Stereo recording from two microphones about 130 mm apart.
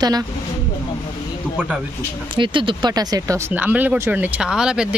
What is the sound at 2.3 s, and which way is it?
Speech, 40° right (ahead or behind).